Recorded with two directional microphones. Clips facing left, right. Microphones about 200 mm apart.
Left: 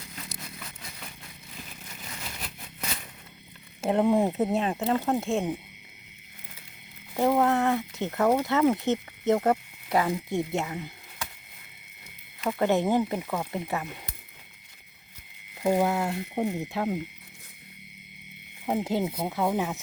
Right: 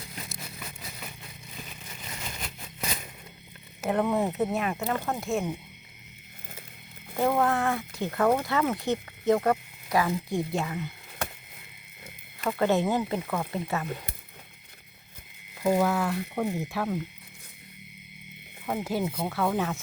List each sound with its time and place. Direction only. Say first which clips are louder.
3.8 s speech: left 3 dB; 25° left (ahead or behind)
7.2 s speech: left 2 dB; 20° left (ahead or behind)
11.2 s a sound: right 5 dB; 55° right (ahead or behind)
12.5 s speech: left 1 dB; 20° left (ahead or behind)
15.6 s speech: even; 20° left (ahead or behind)
18.6 s speech: left 2 dB; 20° left (ahead or behind)